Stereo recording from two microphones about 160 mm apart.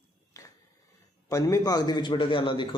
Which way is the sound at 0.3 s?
20° left (ahead or behind).